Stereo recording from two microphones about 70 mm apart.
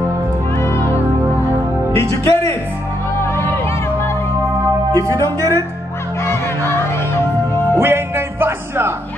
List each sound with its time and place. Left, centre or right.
0.6 s music: left
2.0 s speech: left
3.2 s music: left
4.9 s music: right
6.2 s music: left
7.8 s music: right